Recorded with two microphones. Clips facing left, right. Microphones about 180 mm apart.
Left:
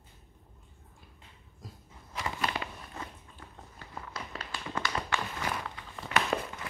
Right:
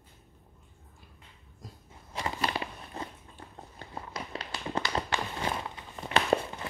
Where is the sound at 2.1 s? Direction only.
30° right (ahead or behind).